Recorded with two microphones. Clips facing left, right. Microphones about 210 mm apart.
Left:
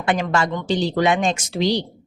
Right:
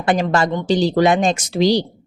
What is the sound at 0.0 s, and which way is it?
Speech, 35° right (ahead or behind).